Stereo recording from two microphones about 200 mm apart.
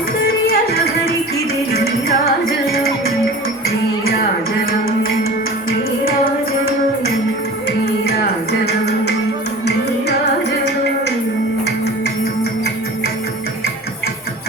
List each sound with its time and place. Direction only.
0.4 s music: 50° left (ahead or behind)
7.9 s music: 55° left (ahead or behind)